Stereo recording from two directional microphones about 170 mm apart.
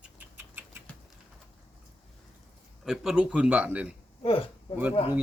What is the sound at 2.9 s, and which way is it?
Speech, 5° right (ahead or behind).